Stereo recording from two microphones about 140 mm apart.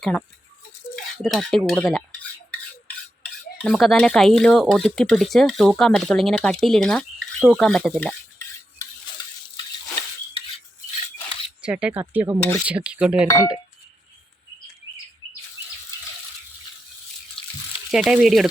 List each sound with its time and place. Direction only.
0.0 s speech: 10° left (ahead or behind)
3.6 s speech: centre (ahead or behind)
11.6 s speech: 10° right (ahead or behind)
12.4 s a sound: 20° left (ahead or behind)
12.6 s speech: 10° right (ahead or behind)
17.9 s speech: 5° right (ahead or behind)